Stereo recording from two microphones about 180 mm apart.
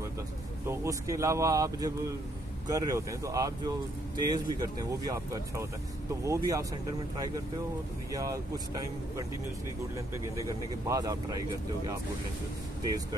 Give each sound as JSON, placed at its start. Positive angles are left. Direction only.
{"t": 0.7, "sound": "speech", "side_deg": -15}
{"t": 9.9, "sound": "speech", "side_deg": -15}